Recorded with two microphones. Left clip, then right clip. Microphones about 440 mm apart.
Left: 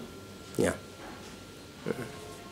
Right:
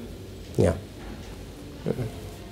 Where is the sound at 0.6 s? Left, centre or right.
Right.